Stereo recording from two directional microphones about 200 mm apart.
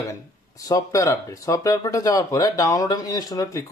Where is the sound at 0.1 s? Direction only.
15° left (ahead or behind).